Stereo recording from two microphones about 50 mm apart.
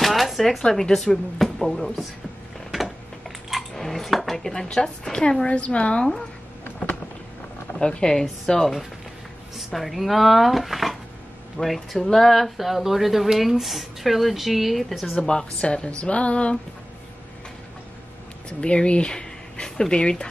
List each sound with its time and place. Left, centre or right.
0.0 s a sound: centre
0.7 s a woman's voice: centre
2.7 s dishes: centre
4.4 s a woman's voice: centre
5.5 s a woman's voice: left
7.8 s a woman's voice: centre
15.2 s a woman's voice: centre
18.6 s speech: left